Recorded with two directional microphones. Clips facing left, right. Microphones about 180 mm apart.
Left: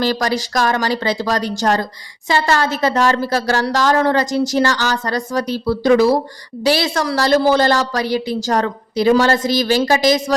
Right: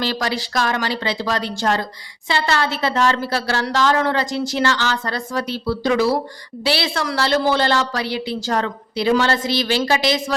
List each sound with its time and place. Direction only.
0.0 s speech: 45° left (ahead or behind)